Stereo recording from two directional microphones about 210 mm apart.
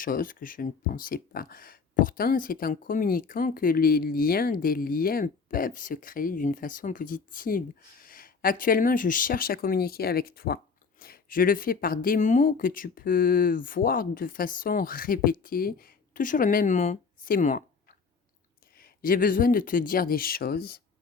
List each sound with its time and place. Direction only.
0.0 s speech: 40° left (ahead or behind)
18.8 s speech: 40° left (ahead or behind)